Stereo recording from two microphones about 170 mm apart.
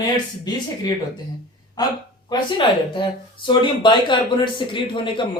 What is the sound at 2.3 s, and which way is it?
Speech, 30° left (ahead or behind).